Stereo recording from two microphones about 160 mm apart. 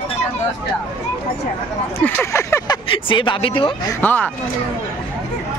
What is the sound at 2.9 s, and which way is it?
A man's voice, 30° left (ahead or behind).